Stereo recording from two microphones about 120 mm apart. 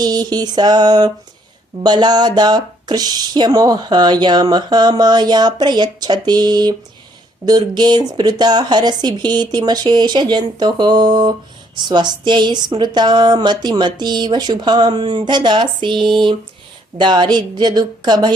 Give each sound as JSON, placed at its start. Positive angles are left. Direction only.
{"t": 0.0, "sound": "a woman's voice", "side_deg": -35}
{"t": 16.1, "sound": "a sound", "side_deg": -45}
{"t": 17.0, "sound": "a woman's voice", "side_deg": -40}